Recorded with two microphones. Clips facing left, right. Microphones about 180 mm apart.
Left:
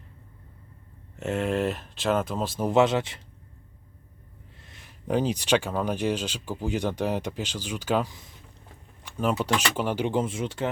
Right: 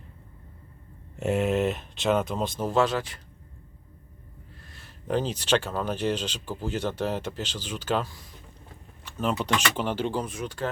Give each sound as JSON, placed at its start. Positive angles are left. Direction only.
{"t": 1.2, "sound": "speech", "side_deg": -5}
{"t": 2.6, "sound": "speech", "side_deg": 20}
{"t": 4.6, "sound": "speech", "side_deg": 20}